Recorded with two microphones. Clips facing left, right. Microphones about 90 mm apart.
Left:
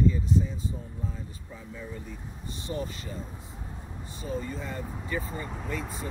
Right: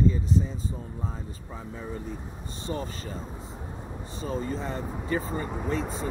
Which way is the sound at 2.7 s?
35° right (ahead or behind).